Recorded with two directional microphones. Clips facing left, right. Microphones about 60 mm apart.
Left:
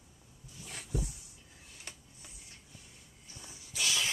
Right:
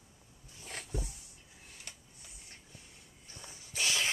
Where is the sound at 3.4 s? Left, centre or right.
Right.